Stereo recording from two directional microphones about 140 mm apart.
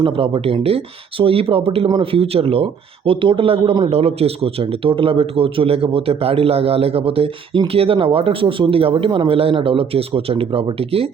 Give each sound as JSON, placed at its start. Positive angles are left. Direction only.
{"t": 0.0, "sound": "a man's voice", "side_deg": -40}